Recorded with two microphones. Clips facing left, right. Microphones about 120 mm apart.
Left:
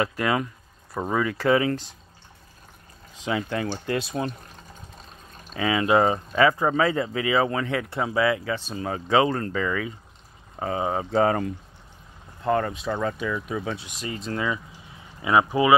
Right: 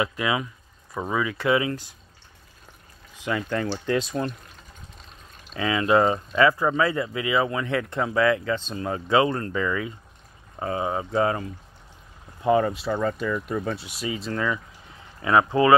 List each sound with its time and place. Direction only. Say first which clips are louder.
0.0 s speech: left 1 dB; 45° left (ahead or behind)
1.0 s speech: left 1 dB; 30° left (ahead or behind)
3.3 s speech: even; 20° left (ahead or behind)
3.8 s speech: right 2 dB; 5° left (ahead or behind)
5.6 s speech: even; 25° left (ahead or behind)
8.0 s speech: right 1 dB; 20° left (ahead or behind); by 11.3 s 35° left (ahead or behind)
12.4 s speech: right 3 dB; 5° right (ahead or behind)
14.3 s speech: left 2 dB; 10° left (ahead or behind)